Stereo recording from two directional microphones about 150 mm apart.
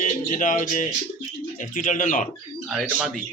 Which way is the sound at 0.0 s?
60° left (ahead or behind).